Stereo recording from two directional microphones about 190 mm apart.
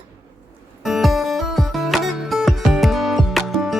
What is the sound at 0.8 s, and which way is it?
Music, centre (ahead or behind).